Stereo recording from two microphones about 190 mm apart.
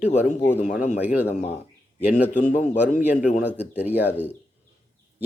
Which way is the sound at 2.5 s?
40° left (ahead or behind).